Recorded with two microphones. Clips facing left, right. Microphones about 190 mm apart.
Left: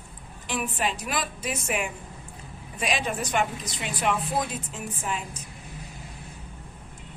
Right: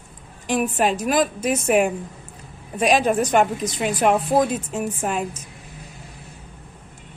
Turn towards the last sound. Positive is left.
turn(degrees=-55)  # may be behind; listen again after turning